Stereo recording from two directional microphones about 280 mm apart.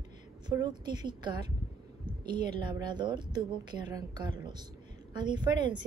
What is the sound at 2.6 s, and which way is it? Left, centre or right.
A woman's voice, centre.